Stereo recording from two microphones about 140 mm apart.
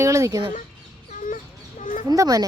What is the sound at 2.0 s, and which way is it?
Speech, 25° right (ahead or behind).